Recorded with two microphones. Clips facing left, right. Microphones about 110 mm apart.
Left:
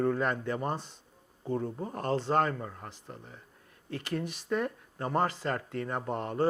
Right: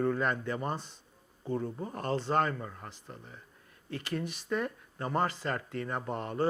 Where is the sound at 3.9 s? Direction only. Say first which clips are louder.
Left 1 dB; 50° left (ahead or behind).